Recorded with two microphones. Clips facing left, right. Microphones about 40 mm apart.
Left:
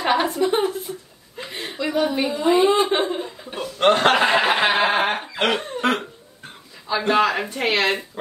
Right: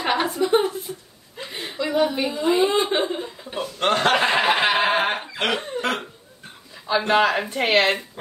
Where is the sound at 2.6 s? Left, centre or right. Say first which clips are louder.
Left 3 dB; left.